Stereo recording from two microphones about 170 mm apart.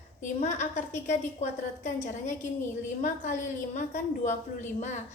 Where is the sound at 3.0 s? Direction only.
50° left (ahead or behind).